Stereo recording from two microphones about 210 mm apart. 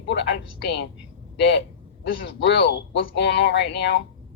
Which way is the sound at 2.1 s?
60° left (ahead or behind).